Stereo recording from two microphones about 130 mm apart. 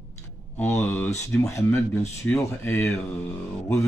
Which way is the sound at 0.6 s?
20° left (ahead or behind).